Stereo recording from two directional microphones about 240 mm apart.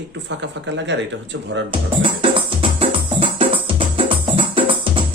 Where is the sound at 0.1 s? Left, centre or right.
Right.